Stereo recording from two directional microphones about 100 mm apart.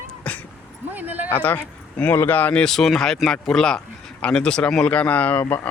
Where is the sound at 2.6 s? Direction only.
5° left (ahead or behind).